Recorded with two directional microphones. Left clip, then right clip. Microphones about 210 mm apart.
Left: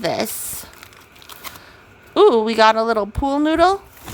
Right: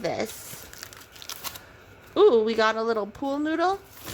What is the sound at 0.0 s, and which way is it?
Speech, 25° left (ahead or behind).